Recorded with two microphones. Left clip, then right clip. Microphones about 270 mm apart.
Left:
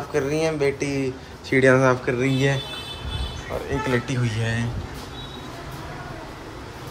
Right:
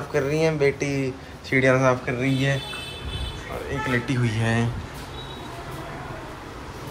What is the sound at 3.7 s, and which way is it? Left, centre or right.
Speech, centre.